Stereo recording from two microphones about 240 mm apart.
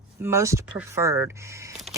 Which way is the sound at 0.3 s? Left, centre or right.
Centre.